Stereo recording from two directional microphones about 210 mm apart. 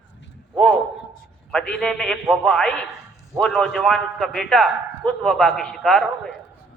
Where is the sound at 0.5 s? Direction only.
Centre (ahead or behind).